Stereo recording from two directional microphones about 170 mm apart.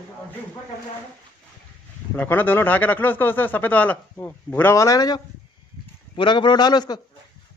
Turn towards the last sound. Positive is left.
turn(degrees=25)  # may be behind; listen again after turning